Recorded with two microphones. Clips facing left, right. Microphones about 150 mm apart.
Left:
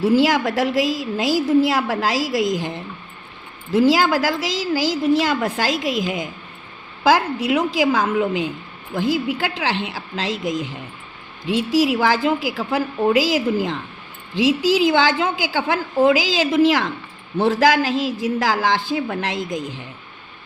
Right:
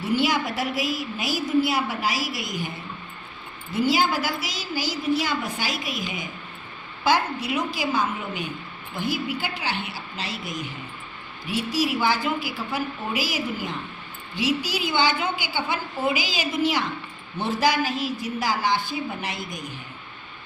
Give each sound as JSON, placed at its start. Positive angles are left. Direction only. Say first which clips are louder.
{"t": 0.0, "sound": "a woman's voice", "louder": "left 7 dB", "side_deg": 90}